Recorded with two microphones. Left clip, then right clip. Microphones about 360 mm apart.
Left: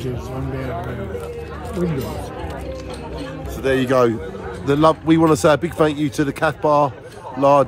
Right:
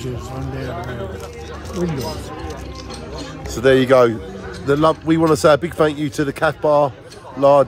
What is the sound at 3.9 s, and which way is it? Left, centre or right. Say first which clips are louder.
A man's voice: right 4 dB; centre.